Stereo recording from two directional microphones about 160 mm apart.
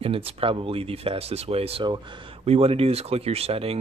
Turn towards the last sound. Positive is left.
turn(degrees=-40)  # may be behind; listen again after turning